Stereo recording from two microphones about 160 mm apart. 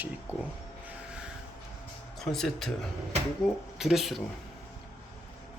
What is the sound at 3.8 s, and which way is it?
Speech, centre (ahead or behind).